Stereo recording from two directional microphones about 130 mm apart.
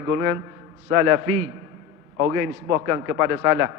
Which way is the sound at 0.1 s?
25° right (ahead or behind).